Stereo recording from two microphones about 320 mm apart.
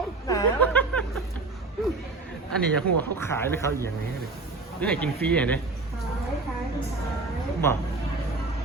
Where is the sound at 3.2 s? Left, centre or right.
Centre.